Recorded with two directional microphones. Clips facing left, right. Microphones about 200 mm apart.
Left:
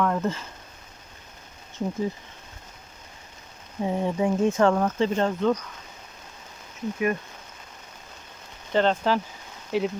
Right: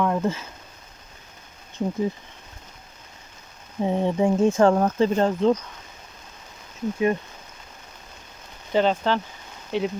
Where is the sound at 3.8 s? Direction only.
25° right (ahead or behind).